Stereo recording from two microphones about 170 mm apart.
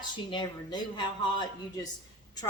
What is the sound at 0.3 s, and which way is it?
Speech, 25° left (ahead or behind).